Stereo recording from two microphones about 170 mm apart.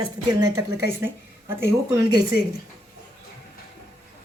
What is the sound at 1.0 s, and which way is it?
Speech, 15° right (ahead or behind).